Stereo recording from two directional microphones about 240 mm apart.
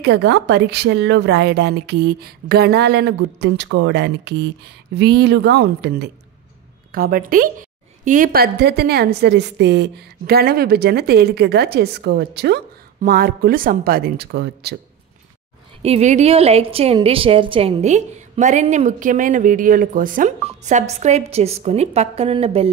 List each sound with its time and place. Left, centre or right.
0.0 s a woman's voice: right
15.8 s a woman's voice: right